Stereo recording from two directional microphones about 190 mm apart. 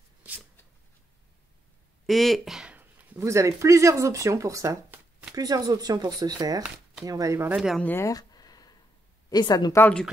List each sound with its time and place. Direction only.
2.0 s speech: centre (ahead or behind); by 7.5 s 15° right (ahead or behind)
7.5 s speech: 5° right (ahead or behind)
7.8 s a sound: 15° left (ahead or behind)
9.3 s a woman's voice: 20° left (ahead or behind)